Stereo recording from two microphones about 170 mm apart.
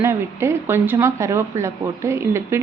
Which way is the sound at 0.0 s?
15° right (ahead or behind).